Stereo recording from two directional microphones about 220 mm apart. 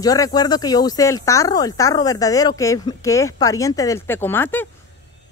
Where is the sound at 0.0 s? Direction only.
15° left (ahead or behind).